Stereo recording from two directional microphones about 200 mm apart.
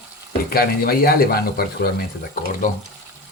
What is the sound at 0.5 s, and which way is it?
Speech, 50° left (ahead or behind).